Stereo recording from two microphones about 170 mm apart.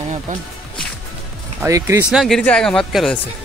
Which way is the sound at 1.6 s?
15° right (ahead or behind).